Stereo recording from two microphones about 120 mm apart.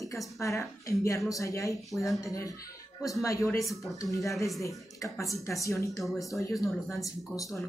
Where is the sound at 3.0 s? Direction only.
25° left (ahead or behind).